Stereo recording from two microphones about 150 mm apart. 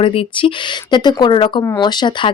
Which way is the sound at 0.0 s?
35° left (ahead or behind).